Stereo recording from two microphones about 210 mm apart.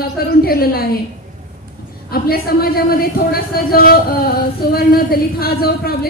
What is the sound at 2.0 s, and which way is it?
A woman's voice, 45° left (ahead or behind).